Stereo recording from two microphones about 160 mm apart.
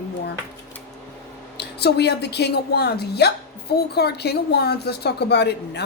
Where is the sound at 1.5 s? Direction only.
90° left.